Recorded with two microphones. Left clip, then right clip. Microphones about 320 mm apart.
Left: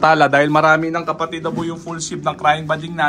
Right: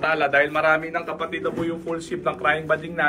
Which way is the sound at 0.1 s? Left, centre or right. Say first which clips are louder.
Left 7 dB; centre.